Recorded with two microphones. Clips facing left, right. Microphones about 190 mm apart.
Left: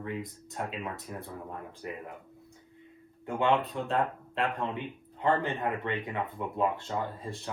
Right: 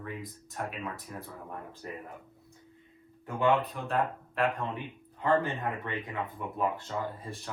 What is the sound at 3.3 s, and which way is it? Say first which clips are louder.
Speech: even; 20° left (ahead or behind).